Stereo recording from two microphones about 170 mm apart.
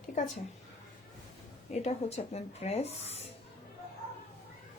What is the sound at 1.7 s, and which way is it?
Speech, 40° left (ahead or behind).